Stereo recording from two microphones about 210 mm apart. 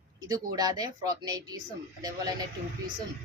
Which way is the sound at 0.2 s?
20° right (ahead or behind).